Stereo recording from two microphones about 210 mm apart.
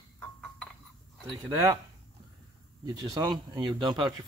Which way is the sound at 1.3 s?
15° right (ahead or behind).